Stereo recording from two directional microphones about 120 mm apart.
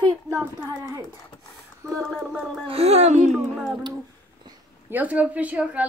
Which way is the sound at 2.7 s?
60° right (ahead or behind).